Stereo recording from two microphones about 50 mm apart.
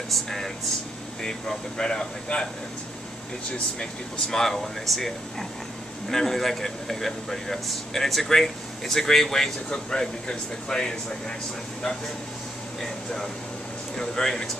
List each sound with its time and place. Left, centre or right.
0.1 s speech: centre
3.8 s speech: centre
12.8 s speech: centre